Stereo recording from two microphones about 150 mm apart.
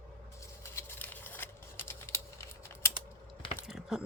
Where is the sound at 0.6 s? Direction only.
15° left (ahead or behind).